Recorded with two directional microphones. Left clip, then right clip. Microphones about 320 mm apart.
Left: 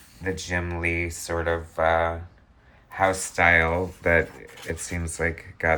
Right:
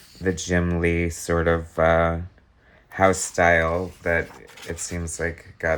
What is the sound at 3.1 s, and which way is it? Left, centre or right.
Speech, centre.